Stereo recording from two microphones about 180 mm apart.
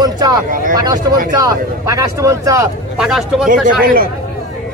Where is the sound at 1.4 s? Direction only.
20° right (ahead or behind).